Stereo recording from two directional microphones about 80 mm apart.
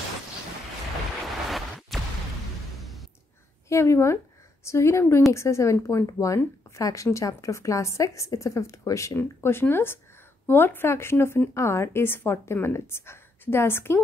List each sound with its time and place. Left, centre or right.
1.2 s waves: centre
2.8 s music: centre
3.6 s speech: left